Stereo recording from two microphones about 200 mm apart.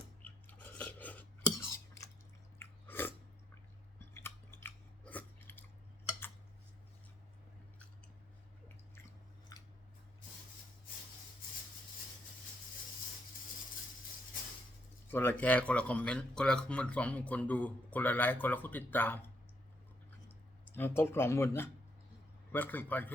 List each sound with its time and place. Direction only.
0.3 s a sound: 10° left (ahead or behind)
2.6 s chewing: 10° left (ahead or behind)
4.6 s chewing: 10° left (ahead or behind)
15.1 s speech: 10° left (ahead or behind)
20.7 s speech: 10° left (ahead or behind)